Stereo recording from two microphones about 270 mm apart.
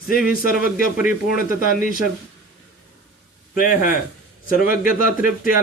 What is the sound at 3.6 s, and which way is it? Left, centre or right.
Speech, left.